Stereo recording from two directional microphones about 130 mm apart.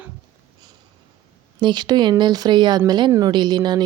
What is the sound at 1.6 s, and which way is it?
A woman's voice, 35° right (ahead or behind).